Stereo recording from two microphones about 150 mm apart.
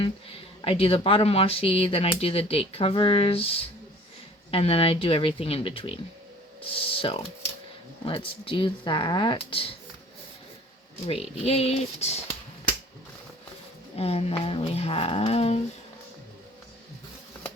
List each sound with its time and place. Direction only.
0.0 s speech: 35° left (ahead or behind)
11.4 s speech: 45° left (ahead or behind)
13.9 s speech: 40° left (ahead or behind)